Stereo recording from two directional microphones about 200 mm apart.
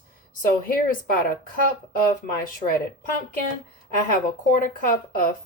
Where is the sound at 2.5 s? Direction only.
45° left (ahead or behind).